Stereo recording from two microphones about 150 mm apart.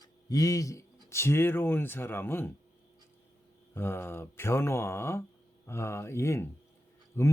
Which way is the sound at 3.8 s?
15° left (ahead or behind).